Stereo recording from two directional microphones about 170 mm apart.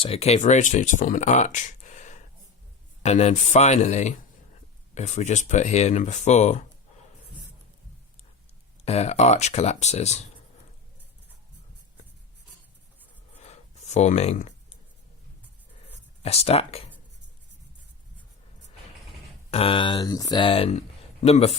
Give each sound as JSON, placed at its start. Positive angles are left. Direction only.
{"t": 0.0, "sound": "speech", "side_deg": 35}
{"t": 8.8, "sound": "speech", "side_deg": 40}
{"t": 13.4, "sound": "a sound", "side_deg": 40}
{"t": 16.2, "sound": "speech", "side_deg": 35}
{"t": 19.5, "sound": "speech", "side_deg": 35}